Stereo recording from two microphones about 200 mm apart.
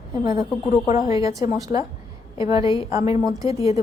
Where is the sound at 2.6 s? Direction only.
25° left (ahead or behind).